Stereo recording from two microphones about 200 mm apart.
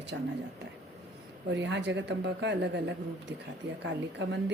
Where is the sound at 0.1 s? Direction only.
65° right (ahead or behind).